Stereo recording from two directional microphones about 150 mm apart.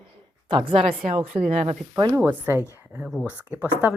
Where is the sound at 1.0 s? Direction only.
45° right (ahead or behind).